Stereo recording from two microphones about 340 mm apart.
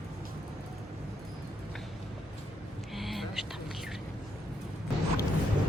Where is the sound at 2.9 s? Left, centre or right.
Centre.